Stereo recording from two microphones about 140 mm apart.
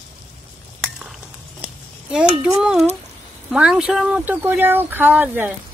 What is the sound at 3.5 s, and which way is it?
Speech, 5° right (ahead or behind).